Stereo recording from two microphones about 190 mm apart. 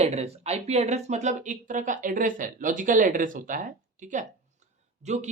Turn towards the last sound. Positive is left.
turn(degrees=-40)  # may be behind; listen again after turning